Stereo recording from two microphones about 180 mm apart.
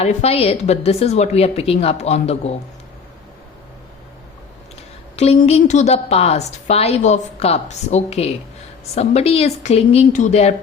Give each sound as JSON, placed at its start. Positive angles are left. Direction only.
{"t": 0.0, "sound": "a woman's voice", "side_deg": 35}
{"t": 5.1, "sound": "a woman's voice", "side_deg": 35}